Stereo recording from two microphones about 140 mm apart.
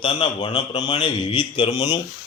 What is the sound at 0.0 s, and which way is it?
A man's voice, 35° left (ahead or behind).